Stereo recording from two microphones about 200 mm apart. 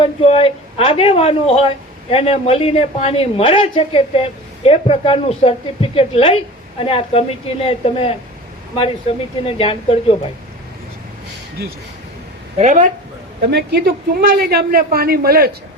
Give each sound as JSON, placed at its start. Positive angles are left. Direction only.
{"t": 0.0, "sound": "a woman's voice", "side_deg": 30}
{"t": 9.5, "sound": "a woman's voice", "side_deg": 25}
{"t": 12.5, "sound": "speech", "side_deg": -40}
{"t": 13.5, "sound": "a woman's voice", "side_deg": -55}